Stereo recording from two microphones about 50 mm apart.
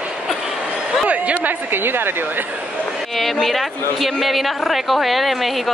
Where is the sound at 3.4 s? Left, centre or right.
Centre.